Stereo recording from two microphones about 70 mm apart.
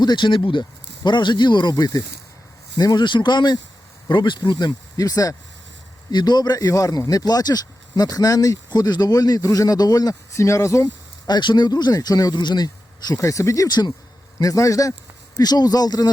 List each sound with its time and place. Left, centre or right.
0.0 s speech: left
2.7 s speech: left
6.1 s speech: left
10.3 s a man's voice: left
10.8 s speech: left
13.1 s a man's voice: left
13.7 s speech: left
14.3 s a man's voice: left
15.4 s speech: left